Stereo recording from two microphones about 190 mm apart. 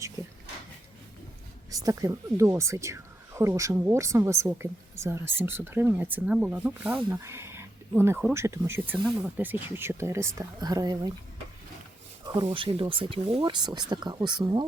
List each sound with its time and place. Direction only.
1.7 s a woman's voice: 20° right (ahead or behind)
12.2 s a sound: 20° right (ahead or behind)
12.5 s speech: 30° right (ahead or behind)